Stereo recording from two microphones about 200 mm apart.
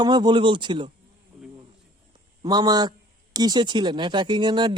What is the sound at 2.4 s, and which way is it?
Speech, 20° right (ahead or behind).